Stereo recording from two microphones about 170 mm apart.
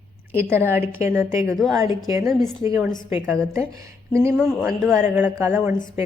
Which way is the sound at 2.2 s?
Centre (ahead or behind).